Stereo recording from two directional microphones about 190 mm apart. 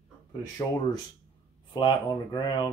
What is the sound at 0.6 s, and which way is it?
Speech, 20° left (ahead or behind).